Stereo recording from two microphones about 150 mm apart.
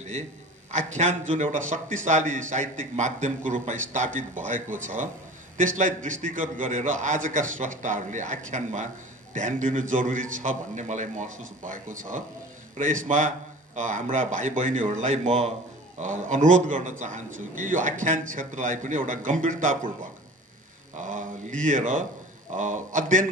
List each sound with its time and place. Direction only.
0.7 s a man's voice: 50° right (ahead or behind)
21.0 s a man's voice: 55° right (ahead or behind)